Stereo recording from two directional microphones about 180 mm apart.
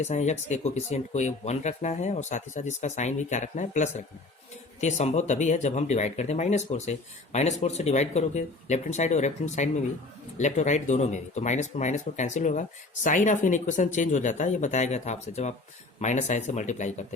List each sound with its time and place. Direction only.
0.1 s speech: 40° left (ahead or behind)